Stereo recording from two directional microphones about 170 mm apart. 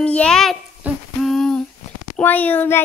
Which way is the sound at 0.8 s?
Centre (ahead or behind).